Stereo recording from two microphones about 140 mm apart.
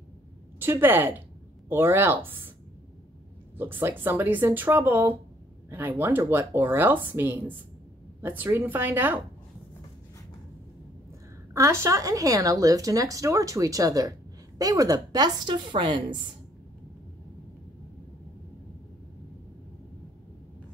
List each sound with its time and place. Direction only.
0.6 s speech: 15° right (ahead or behind)
3.5 s speech: 15° right (ahead or behind)
11.5 s a woman's voice: 20° right (ahead or behind)